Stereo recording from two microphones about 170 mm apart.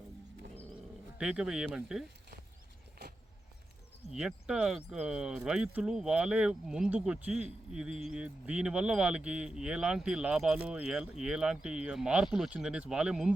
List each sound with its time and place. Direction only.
1.2 s speech: 5° right (ahead or behind)
3.0 s vehicle: 70° right (ahead or behind)
4.1 s speech: 5° right (ahead or behind)